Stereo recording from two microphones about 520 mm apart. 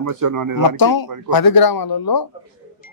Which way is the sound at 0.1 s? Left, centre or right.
Right.